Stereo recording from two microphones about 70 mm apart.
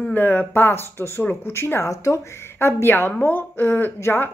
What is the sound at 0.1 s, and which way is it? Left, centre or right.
A woman's voice, left.